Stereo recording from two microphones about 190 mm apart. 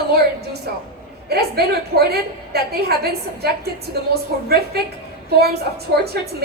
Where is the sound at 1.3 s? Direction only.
55° right (ahead or behind).